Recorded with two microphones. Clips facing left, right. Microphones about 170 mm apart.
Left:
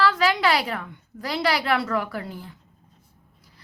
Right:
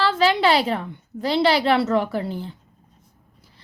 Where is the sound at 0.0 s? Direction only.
25° right (ahead or behind).